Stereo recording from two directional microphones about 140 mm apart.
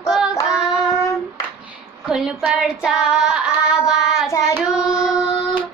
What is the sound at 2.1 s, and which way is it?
Child singing, 5° right (ahead or behind).